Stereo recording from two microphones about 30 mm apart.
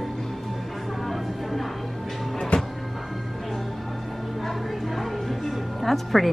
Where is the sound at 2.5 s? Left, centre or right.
Left.